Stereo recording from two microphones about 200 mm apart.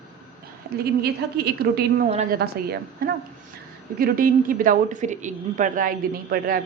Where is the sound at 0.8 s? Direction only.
50° right (ahead or behind).